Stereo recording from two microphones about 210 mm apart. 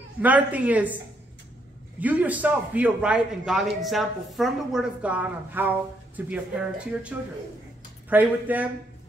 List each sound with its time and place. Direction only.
0.2 s a man's voice: 5° right (ahead or behind)
2.0 s a man's voice: 5° right (ahead or behind)